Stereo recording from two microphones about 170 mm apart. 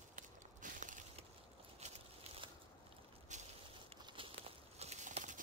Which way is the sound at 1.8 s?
35° right (ahead or behind).